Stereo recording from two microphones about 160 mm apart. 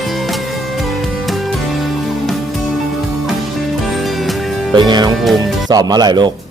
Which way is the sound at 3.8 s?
Centre (ahead or behind).